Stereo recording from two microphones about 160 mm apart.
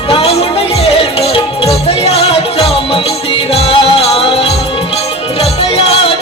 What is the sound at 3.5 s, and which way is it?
Music, 40° left (ahead or behind).